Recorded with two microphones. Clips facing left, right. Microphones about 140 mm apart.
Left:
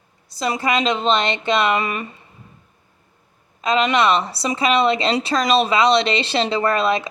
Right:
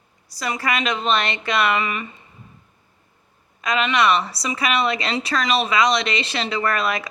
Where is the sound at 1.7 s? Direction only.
40° left (ahead or behind).